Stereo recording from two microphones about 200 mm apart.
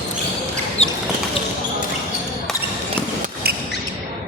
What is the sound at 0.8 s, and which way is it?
Basketball bounce, 30° left (ahead or behind).